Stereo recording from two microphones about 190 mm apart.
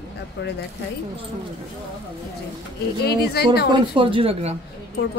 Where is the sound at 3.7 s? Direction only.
25° right (ahead or behind).